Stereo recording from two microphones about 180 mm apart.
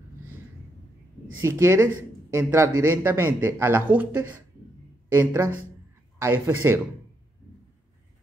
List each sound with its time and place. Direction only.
1.4 s speech: 15° right (ahead or behind)